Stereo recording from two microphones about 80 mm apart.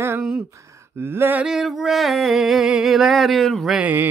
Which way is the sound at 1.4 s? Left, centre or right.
Centre.